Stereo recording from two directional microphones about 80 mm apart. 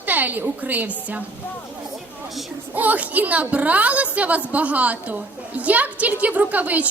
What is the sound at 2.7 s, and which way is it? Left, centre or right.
A woman's voice, right.